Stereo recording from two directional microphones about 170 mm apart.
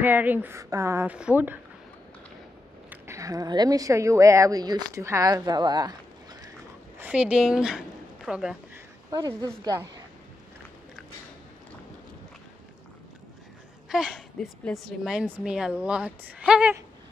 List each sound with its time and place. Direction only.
0.0 s a woman's voice: 10° right (ahead or behind)
2.9 s a woman's voice: 20° right (ahead or behind)
7.0 s a woman's voice: 5° right (ahead or behind)
9.1 s a woman's voice: 20° right (ahead or behind)
13.8 s a woman's voice: 5° right (ahead or behind)